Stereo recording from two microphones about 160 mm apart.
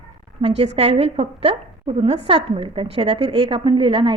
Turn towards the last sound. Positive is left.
turn(degrees=-30)  # may be behind; listen again after turning